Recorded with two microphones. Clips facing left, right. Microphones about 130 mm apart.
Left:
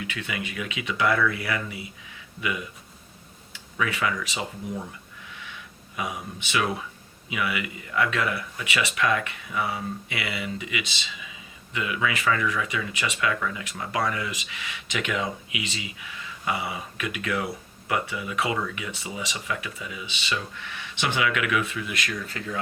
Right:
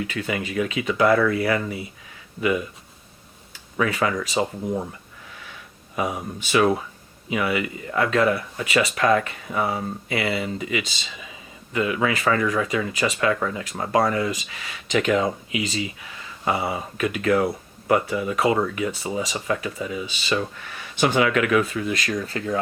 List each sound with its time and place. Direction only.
0.0 s speech: 40° right (ahead or behind)
6.0 s speech: 40° right (ahead or behind)